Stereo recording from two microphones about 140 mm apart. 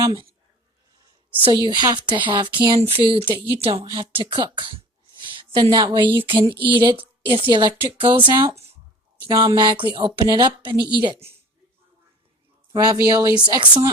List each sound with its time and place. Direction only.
1.5 s a woman's voice: 35° right (ahead or behind)
12.7 s a woman's voice: 30° right (ahead or behind)